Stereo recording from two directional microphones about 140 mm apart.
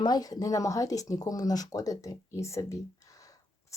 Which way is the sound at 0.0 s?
30° left (ahead or behind).